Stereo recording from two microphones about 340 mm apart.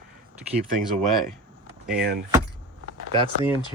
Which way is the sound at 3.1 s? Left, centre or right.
Centre.